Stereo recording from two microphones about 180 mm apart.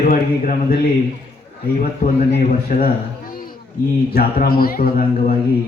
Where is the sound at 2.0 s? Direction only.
50° left (ahead or behind).